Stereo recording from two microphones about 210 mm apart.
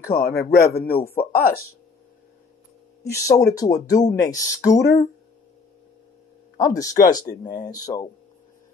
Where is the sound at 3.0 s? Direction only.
15° left (ahead or behind).